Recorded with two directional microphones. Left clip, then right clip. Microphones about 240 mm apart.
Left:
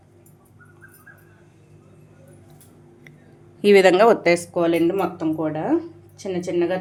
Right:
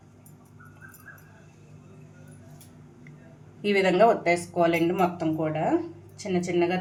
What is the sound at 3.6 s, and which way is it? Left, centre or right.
A woman's voice, left.